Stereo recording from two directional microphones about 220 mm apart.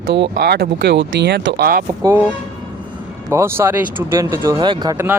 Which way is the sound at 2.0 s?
10° right (ahead or behind).